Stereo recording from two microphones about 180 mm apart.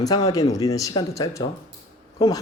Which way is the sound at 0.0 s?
20° left (ahead or behind).